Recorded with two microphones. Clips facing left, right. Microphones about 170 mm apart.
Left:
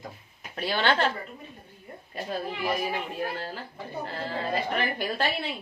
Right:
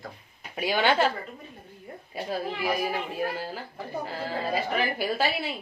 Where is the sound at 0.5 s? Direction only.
10° right (ahead or behind).